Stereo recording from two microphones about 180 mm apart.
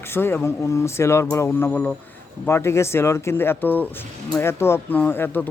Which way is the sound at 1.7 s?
5° left (ahead or behind).